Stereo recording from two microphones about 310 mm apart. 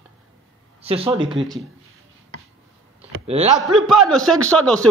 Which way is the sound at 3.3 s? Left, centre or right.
Centre.